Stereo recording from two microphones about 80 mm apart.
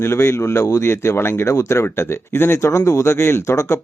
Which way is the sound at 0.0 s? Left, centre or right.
Left.